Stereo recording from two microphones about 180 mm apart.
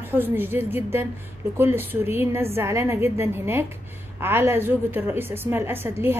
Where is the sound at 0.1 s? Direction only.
10° right (ahead or behind).